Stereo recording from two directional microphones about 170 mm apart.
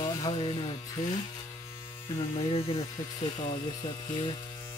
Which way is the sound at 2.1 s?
30° left (ahead or behind).